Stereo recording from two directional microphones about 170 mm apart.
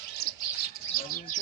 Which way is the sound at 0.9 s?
55° left (ahead or behind).